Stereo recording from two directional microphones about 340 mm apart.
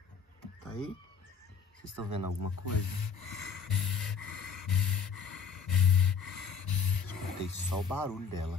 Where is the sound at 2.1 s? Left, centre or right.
Left.